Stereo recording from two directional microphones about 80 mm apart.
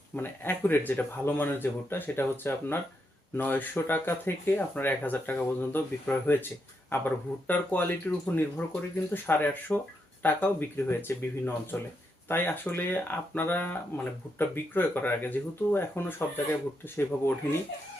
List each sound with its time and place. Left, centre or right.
0.2 s speech: left